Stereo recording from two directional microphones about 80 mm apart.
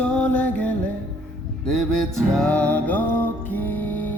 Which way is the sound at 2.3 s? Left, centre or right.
Centre.